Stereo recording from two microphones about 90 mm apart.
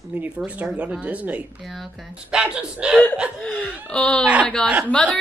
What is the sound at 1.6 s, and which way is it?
Speech, centre (ahead or behind).